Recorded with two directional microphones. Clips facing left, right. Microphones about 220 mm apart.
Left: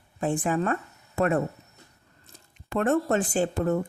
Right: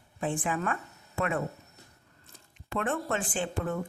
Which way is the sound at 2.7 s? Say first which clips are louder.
Left 7 dB; 40° left (ahead or behind).